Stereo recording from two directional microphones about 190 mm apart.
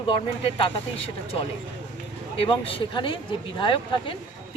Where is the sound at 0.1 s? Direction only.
25° left (ahead or behind).